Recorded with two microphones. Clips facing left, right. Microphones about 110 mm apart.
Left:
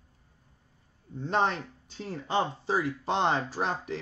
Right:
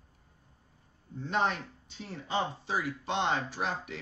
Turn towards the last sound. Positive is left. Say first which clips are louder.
# left 4 dB
turn(degrees=35)  # may be behind; listen again after turning